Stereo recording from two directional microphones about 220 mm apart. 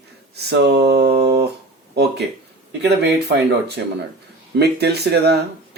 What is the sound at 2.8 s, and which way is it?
Speech, 50° right (ahead or behind).